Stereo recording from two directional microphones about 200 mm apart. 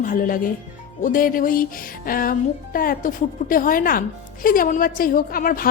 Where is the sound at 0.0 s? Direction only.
45° left (ahead or behind).